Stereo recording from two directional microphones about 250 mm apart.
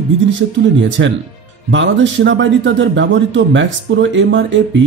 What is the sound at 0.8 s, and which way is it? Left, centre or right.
Speech, right.